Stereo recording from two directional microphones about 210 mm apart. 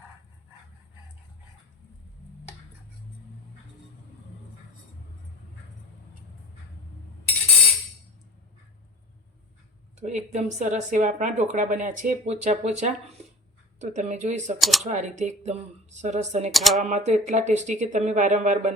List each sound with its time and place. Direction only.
10.0 s speech: 35° right (ahead or behind)
14.6 s speech: centre (ahead or behind)
14.8 s speech: 35° right (ahead or behind)
16.5 s speech: centre (ahead or behind)
16.9 s speech: 35° right (ahead or behind)